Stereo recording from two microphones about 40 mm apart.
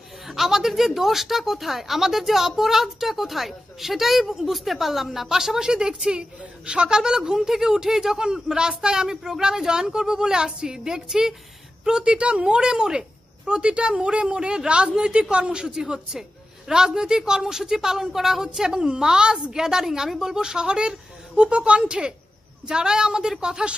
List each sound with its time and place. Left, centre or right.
0.3 s a woman's voice: centre